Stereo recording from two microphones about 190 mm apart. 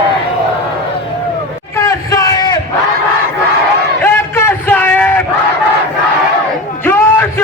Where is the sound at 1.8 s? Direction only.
20° left (ahead or behind).